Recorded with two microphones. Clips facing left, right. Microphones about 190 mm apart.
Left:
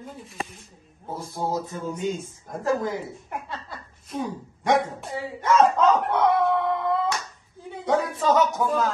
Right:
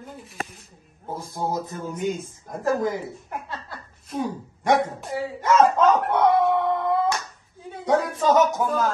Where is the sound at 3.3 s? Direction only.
Centre (ahead or behind).